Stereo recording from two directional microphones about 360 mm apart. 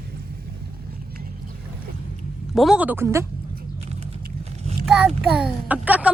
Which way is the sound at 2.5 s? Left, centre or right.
Centre.